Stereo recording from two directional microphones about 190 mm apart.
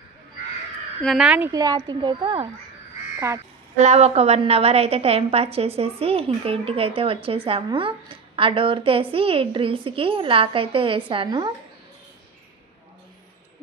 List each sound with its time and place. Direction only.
1.0 s a woman's voice: 5° right (ahead or behind)
1.5 s a woman's voice: 20° right (ahead or behind)
3.7 s a woman's voice: 35° right (ahead or behind)